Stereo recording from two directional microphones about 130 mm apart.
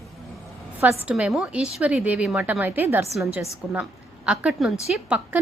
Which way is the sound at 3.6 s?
5° right (ahead or behind).